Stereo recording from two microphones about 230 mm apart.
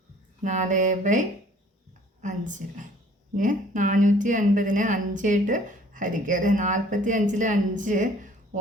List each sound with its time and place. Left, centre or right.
0.4 s a woman's voice: right